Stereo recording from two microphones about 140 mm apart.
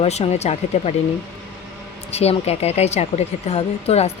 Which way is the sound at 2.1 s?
45° left (ahead or behind).